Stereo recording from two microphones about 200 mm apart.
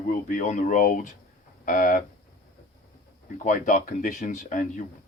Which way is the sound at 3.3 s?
40° left (ahead or behind).